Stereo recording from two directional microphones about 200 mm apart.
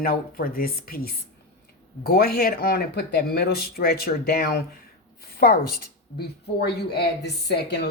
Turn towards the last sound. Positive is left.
turn(degrees=55)  # may be behind; listen again after turning